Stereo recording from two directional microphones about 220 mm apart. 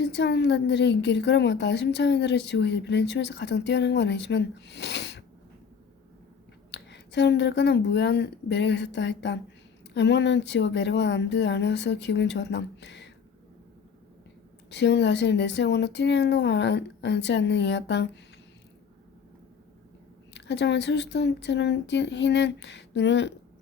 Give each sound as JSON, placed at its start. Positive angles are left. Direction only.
{"t": 0.0, "sound": "a woman's voice", "side_deg": 50}
{"t": 6.7, "sound": "a woman's voice", "side_deg": 50}
{"t": 14.7, "sound": "a woman's voice", "side_deg": 55}
{"t": 20.3, "sound": "a woman's voice", "side_deg": 50}